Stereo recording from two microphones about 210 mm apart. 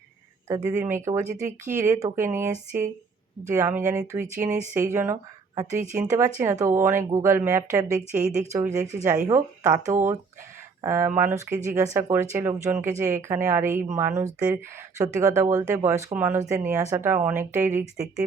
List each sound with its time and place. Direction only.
0.4 s speech: 15° right (ahead or behind)
1.3 s speech: 35° right (ahead or behind)
1.7 s speech: 15° right (ahead or behind)
3.8 s speech: 15° right (ahead or behind)